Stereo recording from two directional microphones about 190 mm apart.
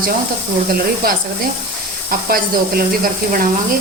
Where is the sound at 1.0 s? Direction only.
50° right (ahead or behind).